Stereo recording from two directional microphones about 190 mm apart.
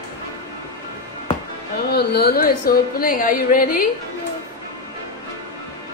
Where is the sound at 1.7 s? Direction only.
55° left (ahead or behind).